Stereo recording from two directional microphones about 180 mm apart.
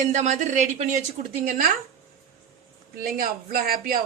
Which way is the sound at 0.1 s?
40° right (ahead or behind).